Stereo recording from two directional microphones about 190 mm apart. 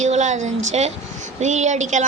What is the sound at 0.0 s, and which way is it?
A woman's voice, 40° right (ahead or behind).